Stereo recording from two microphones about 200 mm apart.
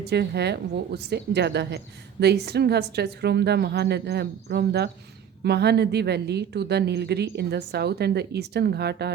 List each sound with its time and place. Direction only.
0.0 s a woman's voice: 55° right (ahead or behind)